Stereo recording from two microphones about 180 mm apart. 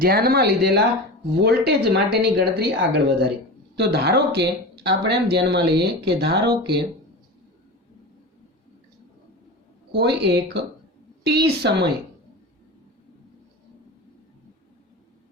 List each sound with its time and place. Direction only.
0.0 s speech: 60° right (ahead or behind)
9.9 s speech: 70° right (ahead or behind)